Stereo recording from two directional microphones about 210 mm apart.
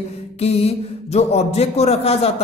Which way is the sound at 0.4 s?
30° left (ahead or behind).